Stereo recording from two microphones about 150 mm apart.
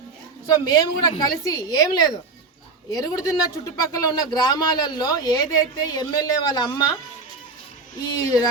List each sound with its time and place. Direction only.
0.4 s speech: 25° left (ahead or behind)
2.9 s speech: 25° left (ahead or behind)